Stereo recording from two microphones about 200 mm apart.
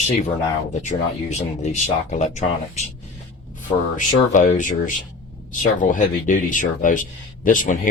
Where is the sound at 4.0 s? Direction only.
40° left (ahead or behind).